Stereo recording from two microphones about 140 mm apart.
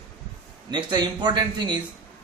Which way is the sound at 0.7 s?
30° right (ahead or behind).